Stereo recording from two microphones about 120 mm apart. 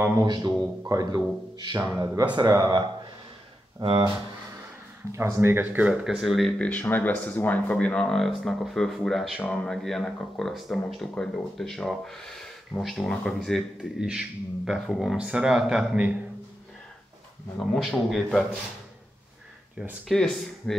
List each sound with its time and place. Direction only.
0.2 s speech: 35° right (ahead or behind)
3.8 s speech: 45° right (ahead or behind)
5.1 s speech: 20° right (ahead or behind)
6.0 s a man's voice: centre (ahead or behind)
6.7 s a man's voice: 15° left (ahead or behind); by 16.2 s 10° right (ahead or behind)
17.6 s a man's voice: centre (ahead or behind)
20.1 s a man's voice: 5° left (ahead or behind)